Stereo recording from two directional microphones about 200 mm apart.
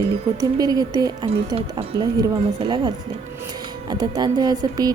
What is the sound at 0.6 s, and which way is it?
A woman's voice, 20° right (ahead or behind).